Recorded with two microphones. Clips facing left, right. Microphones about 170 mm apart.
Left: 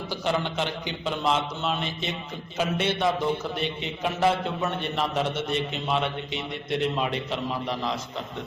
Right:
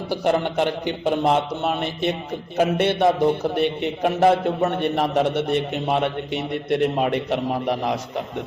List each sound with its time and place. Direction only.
0.3 s a man's voice: 55° right (ahead or behind)